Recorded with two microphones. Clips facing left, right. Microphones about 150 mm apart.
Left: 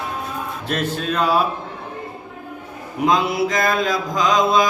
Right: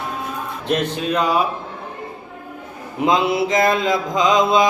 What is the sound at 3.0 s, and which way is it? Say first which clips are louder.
Mantra: right 1 dB; 25° right (ahead or behind).